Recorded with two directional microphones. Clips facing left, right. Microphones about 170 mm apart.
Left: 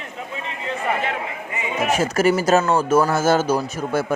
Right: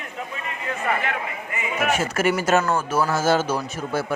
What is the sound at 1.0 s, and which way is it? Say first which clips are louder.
Speech: left 2 dB; 25° left (ahead or behind).